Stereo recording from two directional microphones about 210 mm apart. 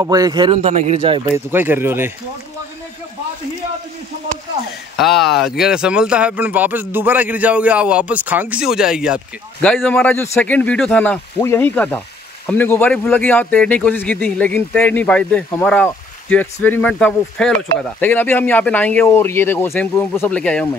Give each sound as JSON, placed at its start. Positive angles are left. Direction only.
{"t": 0.0, "sound": "speech", "side_deg": -15}
{"t": 0.6, "sound": "speech", "side_deg": -30}
{"t": 1.3, "sound": "speech", "side_deg": -10}
{"t": 4.9, "sound": "speech", "side_deg": 0}